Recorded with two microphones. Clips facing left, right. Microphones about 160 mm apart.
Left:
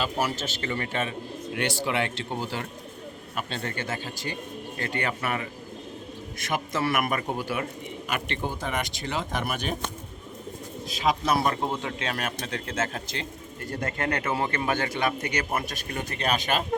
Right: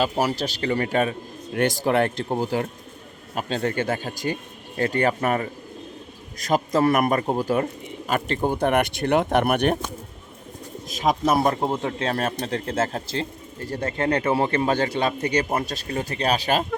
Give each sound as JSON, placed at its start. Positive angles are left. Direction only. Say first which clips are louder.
{"t": 0.0, "sound": "a man's voice", "louder": "right 5 dB", "side_deg": -40}
{"t": 6.5, "sound": "a man's voice", "louder": "right 8 dB", "side_deg": -40}
{"t": 8.5, "sound": "speech", "louder": "right 10 dB", "side_deg": -60}
{"t": 10.8, "sound": "speech", "louder": "right 4 dB", "side_deg": -45}
{"t": 11.4, "sound": "a man's voice", "louder": "right 5 dB", "side_deg": -30}